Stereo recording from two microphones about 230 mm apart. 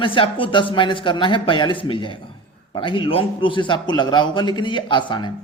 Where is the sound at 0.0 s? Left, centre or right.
Left.